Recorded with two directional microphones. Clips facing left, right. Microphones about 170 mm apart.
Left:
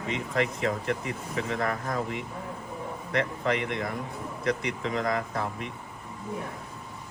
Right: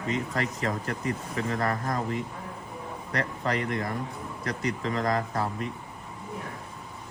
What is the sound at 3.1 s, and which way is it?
Speech, 40° right (ahead or behind).